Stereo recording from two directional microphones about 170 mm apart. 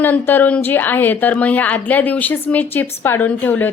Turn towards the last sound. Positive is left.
turn(degrees=10)  # may be behind; listen again after turning